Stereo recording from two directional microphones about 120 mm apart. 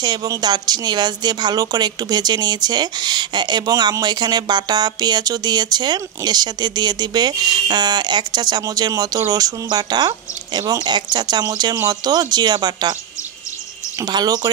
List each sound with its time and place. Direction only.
0.0 s speech: 35° right (ahead or behind)
14.0 s speech: 35° right (ahead or behind)